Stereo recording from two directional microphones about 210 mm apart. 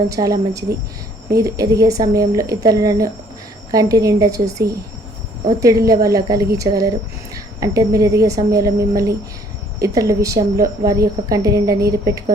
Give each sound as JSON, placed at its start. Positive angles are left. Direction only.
{"t": 0.1, "sound": "a woman's voice", "side_deg": -15}